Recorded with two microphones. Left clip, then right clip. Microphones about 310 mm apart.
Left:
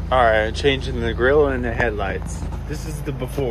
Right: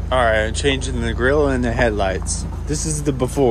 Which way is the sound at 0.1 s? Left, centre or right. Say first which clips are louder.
Left 1 dB; centre.